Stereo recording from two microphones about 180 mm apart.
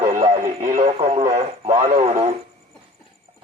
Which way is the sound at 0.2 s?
40° right (ahead or behind).